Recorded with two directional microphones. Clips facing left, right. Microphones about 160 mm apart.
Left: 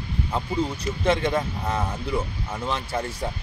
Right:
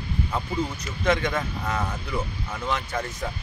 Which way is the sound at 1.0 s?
30° left (ahead or behind).